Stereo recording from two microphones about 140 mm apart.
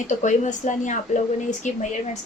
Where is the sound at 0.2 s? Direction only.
60° left (ahead or behind).